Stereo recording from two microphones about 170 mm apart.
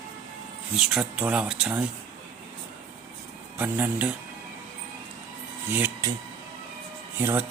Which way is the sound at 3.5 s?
10° right (ahead or behind).